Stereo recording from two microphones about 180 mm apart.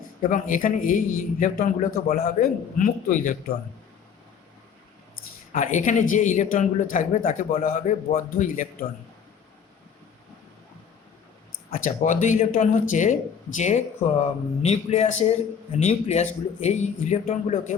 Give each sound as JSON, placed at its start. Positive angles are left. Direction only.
{"t": 0.2, "sound": "a man's voice", "side_deg": 45}
{"t": 5.5, "sound": "a man's voice", "side_deg": 45}
{"t": 11.8, "sound": "a man's voice", "side_deg": 45}